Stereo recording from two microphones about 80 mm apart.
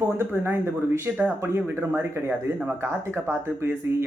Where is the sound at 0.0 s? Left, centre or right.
Right.